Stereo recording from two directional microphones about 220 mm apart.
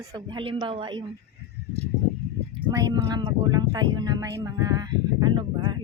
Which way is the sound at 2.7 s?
15° right (ahead or behind).